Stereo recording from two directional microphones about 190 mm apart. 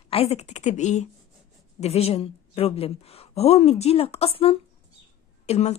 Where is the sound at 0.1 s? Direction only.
35° left (ahead or behind).